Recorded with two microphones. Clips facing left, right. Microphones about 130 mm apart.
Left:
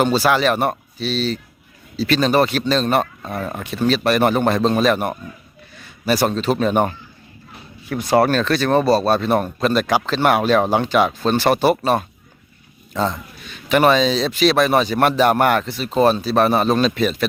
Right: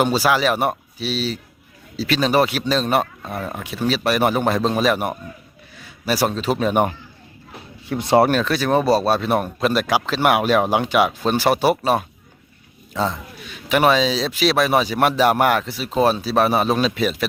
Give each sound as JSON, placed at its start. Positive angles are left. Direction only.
{"t": 0.0, "sound": "a man's voice", "side_deg": -10}
{"t": 7.9, "sound": "speech", "side_deg": -25}
{"t": 8.4, "sound": "a man's voice", "side_deg": -10}